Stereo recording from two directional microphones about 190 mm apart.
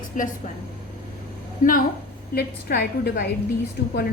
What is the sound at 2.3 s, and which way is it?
Speech, 55° left (ahead or behind).